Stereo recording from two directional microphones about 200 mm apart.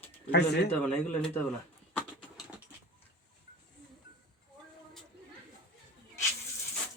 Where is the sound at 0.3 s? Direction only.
55° left (ahead or behind).